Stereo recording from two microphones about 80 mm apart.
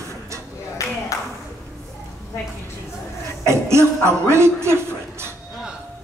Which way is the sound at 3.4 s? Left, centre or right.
Right.